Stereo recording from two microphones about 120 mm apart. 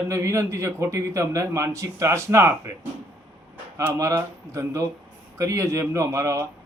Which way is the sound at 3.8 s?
25° right (ahead or behind).